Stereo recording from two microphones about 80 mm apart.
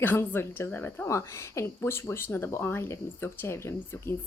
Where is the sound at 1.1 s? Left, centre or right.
Left.